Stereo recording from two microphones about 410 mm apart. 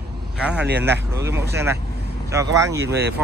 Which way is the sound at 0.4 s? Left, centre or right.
Centre.